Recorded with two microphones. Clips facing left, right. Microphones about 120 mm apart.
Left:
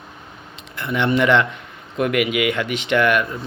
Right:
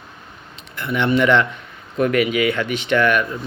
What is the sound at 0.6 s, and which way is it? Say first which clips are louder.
Speech: even; 25° left (ahead or behind).